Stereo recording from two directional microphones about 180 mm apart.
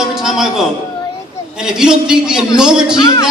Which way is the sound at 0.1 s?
Centre (ahead or behind).